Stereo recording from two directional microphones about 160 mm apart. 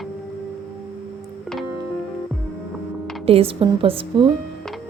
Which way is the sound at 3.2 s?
35° right (ahead or behind).